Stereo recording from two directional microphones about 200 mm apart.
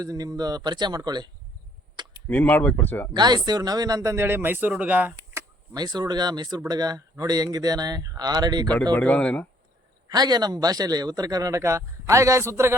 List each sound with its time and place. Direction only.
0.0 s speech: 20° right (ahead or behind)
2.2 s speech: 5° left (ahead or behind)
3.2 s speech: 20° right (ahead or behind)
8.7 s speech: 5° left (ahead or behind)
10.1 s speech: 20° right (ahead or behind)